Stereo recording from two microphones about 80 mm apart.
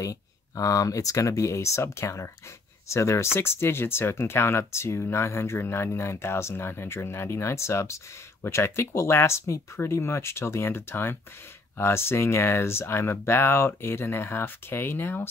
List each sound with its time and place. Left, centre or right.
0.0 s speech: left